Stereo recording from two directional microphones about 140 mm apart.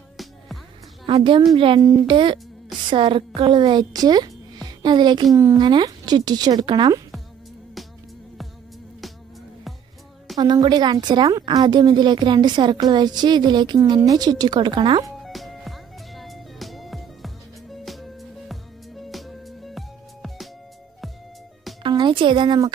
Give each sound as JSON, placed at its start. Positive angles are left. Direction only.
{"t": 1.0, "sound": "a woman's voice", "side_deg": -40}
{"t": 10.3, "sound": "a woman's voice", "side_deg": -30}
{"t": 15.2, "sound": "music", "side_deg": 0}
{"t": 21.8, "sound": "a sound", "side_deg": -35}